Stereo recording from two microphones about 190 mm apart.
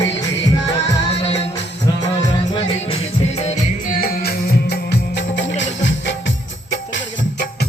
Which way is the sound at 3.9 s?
50° left (ahead or behind).